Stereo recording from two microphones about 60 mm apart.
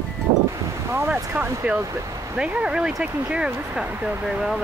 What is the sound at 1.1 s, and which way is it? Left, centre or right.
Speech, right.